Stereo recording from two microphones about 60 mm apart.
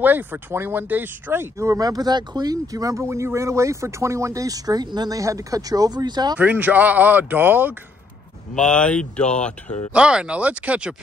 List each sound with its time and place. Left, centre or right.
0.0 s speech: right
1.7 s speech: right
3.0 s speech: right
6.3 s speech: right
8.5 s speech: centre
9.9 s speech: centre